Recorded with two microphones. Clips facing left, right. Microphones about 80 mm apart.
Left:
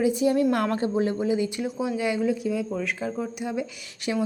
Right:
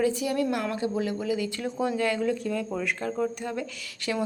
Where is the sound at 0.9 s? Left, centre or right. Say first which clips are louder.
Left 4 dB; left.